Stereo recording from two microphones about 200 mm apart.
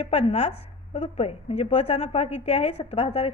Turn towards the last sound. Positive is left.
turn(degrees=30)  # may be behind; listen again after turning